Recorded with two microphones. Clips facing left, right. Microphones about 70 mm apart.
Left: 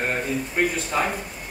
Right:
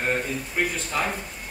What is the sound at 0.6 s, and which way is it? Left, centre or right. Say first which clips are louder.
Speech: left 3 dB; centre.